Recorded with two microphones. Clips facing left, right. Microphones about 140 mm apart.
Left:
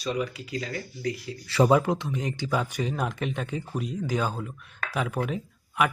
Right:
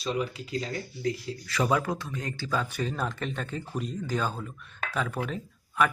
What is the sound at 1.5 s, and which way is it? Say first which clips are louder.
Speech: left 6 dB; 30° left (ahead or behind).